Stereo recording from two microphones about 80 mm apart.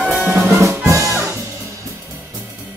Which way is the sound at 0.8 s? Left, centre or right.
Right.